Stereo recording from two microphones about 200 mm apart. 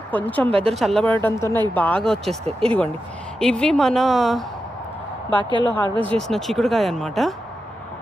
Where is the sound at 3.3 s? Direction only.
5° left (ahead or behind).